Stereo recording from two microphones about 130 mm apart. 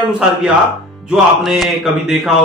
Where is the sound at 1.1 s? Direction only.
5° right (ahead or behind).